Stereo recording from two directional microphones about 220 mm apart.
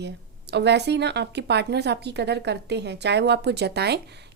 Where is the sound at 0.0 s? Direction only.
50° right (ahead or behind).